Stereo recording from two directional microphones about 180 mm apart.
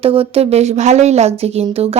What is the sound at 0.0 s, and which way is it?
Speech, 30° right (ahead or behind).